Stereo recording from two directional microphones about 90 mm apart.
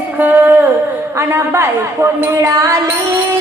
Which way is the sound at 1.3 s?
30° right (ahead or behind).